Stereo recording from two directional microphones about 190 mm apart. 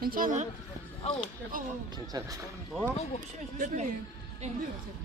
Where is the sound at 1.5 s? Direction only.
45° right (ahead or behind).